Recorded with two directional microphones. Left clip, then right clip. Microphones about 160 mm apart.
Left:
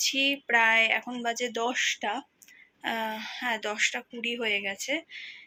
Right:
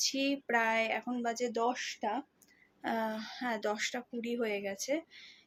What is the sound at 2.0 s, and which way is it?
Speech, 15° right (ahead or behind).